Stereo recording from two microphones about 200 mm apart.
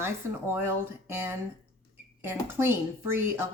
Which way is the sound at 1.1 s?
10° right (ahead or behind).